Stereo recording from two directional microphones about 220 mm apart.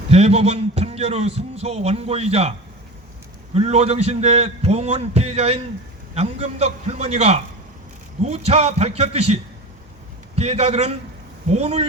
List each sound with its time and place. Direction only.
0.1 s a man's voice: 30° right (ahead or behind)